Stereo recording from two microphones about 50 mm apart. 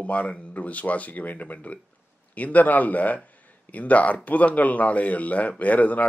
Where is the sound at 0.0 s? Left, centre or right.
Left.